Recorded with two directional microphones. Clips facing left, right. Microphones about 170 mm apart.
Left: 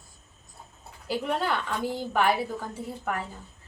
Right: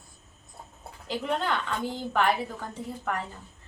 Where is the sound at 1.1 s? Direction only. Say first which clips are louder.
Left 1 dB; 5° left (ahead or behind).